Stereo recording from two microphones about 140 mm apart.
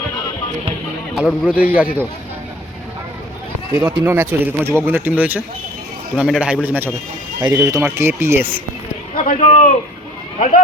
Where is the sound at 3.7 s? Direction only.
10° right (ahead or behind).